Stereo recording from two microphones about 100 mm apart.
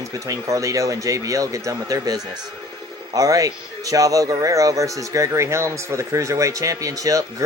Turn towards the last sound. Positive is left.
turn(degrees=-35)  # may be behind; listen again after turning